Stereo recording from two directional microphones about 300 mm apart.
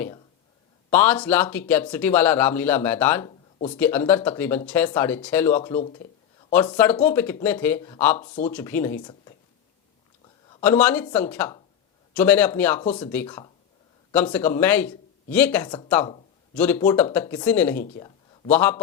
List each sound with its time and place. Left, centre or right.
0.9 s speech: centre
8.2 s speech: left
8.4 s speech: centre
10.5 s speech: centre